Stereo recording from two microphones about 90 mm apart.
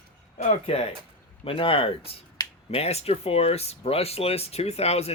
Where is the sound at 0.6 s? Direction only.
90° left.